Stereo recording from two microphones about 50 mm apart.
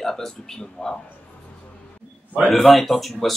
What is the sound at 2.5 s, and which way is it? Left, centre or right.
Speech, centre.